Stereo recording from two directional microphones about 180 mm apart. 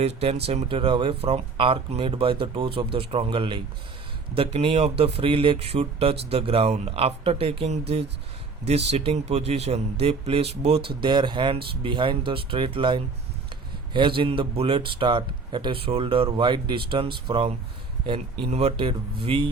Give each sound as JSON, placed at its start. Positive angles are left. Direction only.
{"t": 0.0, "sound": "speech", "side_deg": -35}